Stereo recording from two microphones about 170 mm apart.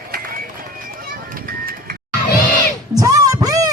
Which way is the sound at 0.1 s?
55° right (ahead or behind).